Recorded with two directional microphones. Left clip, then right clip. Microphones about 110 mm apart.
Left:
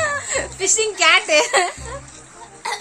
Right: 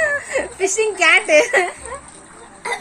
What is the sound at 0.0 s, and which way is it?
Speech, 40° left (ahead or behind).